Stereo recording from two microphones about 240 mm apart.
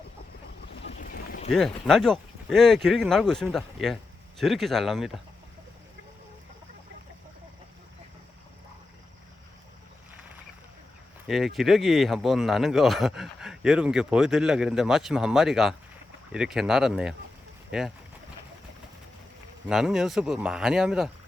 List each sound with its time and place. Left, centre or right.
0.9 s boat: left
1.5 s speech: centre
11.3 s speech: centre
19.6 s speech: centre